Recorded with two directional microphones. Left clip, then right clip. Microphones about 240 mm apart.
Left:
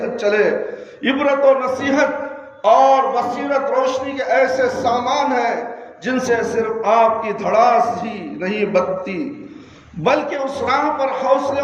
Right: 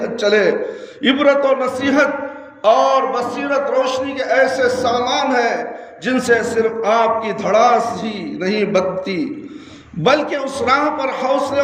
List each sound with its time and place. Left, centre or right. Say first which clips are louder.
0.2 s a man's voice: right 2 dB; right